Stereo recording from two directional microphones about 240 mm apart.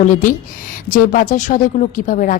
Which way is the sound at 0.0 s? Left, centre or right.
Left.